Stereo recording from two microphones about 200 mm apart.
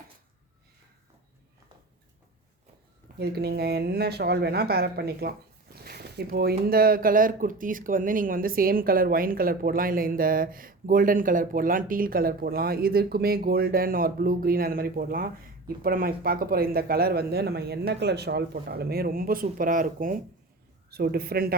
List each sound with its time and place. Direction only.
3.2 s speech: 50° right (ahead or behind)